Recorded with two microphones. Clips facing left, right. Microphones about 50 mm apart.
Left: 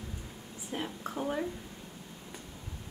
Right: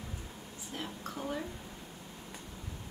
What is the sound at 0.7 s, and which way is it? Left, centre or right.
Speech, centre.